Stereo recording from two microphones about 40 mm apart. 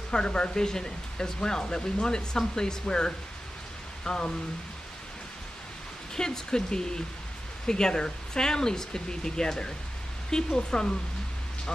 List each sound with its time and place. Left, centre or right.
0.1 s speech: left
6.1 s speech: centre